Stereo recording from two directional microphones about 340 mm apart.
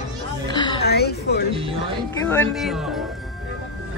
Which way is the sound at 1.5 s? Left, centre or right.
Centre.